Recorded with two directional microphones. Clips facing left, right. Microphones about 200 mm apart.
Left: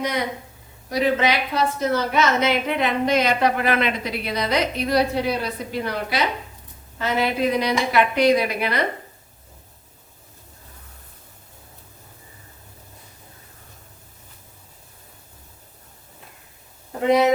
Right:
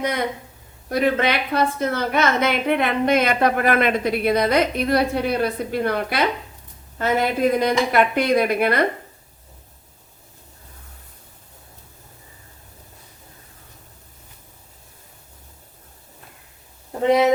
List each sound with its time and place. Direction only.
0.0 s a woman's voice: 55° right (ahead or behind)